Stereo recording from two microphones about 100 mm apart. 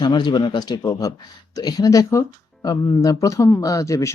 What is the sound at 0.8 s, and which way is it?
Speech, 35° left (ahead or behind).